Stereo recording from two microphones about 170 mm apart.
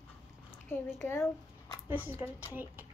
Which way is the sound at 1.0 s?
15° left (ahead or behind).